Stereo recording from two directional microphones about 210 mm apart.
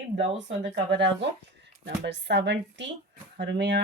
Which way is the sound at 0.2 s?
60° right (ahead or behind).